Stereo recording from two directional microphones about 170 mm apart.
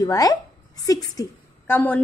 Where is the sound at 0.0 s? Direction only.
20° left (ahead or behind).